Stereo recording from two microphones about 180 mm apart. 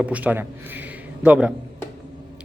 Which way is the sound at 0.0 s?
10° right (ahead or behind).